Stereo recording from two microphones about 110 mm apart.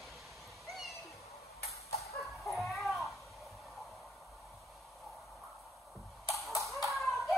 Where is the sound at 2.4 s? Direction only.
Centre (ahead or behind).